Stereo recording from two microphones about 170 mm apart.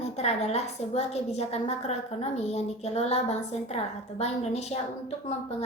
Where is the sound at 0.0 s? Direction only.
40° left (ahead or behind).